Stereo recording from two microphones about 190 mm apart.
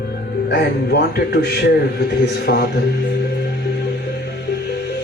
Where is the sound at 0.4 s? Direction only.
60° left (ahead or behind).